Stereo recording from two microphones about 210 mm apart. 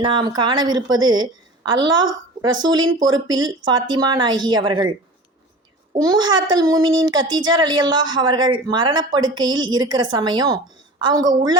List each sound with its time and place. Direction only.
0.0 s a child's voice: 20° right (ahead or behind)
6.0 s a child's voice: 20° right (ahead or behind)